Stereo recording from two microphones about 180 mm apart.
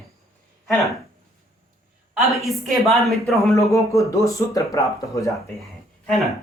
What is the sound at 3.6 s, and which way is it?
Speech, 15° left (ahead or behind).